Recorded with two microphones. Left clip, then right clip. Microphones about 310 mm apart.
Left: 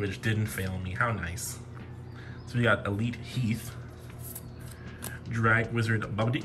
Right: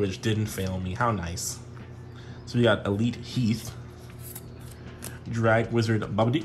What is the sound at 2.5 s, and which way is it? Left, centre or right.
Speech, centre.